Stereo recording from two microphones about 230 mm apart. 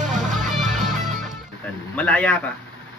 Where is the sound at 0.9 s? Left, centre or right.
Right.